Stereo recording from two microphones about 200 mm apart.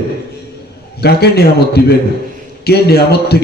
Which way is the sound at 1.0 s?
55° left (ahead or behind).